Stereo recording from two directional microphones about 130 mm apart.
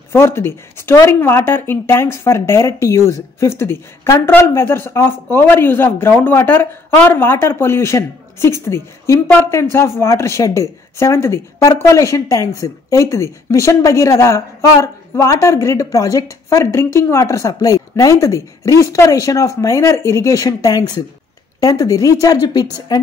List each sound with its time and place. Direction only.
0.1 s speech: 20° left (ahead or behind)